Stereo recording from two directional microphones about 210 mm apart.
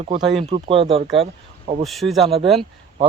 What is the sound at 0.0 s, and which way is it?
Speech, 25° right (ahead or behind).